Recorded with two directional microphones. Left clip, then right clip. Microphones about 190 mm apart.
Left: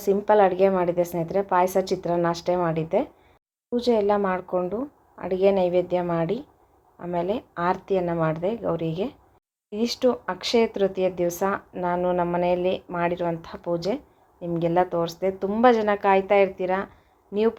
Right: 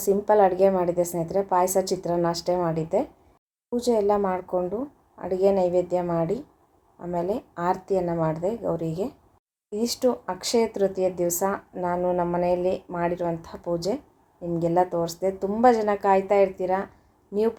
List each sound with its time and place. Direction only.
0.0 s speech: centre (ahead or behind)